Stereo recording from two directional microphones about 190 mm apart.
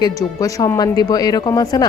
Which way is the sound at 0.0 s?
20° left (ahead or behind).